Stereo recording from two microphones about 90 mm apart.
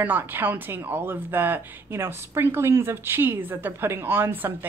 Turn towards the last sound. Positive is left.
turn(degrees=-25)  # may be behind; listen again after turning